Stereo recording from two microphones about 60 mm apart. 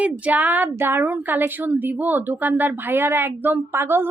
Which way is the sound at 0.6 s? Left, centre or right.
Right.